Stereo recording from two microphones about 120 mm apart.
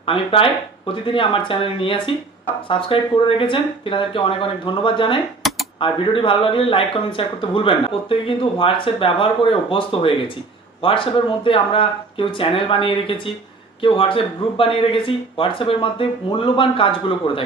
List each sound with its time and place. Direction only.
0.0 s speech: 50° left (ahead or behind)